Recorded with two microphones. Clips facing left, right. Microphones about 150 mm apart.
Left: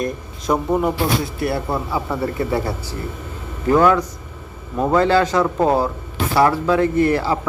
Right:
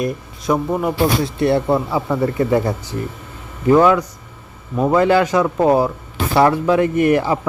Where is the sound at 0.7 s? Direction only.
Centre (ahead or behind).